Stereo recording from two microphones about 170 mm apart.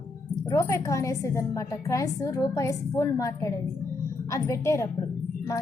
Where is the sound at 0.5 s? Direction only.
15° left (ahead or behind).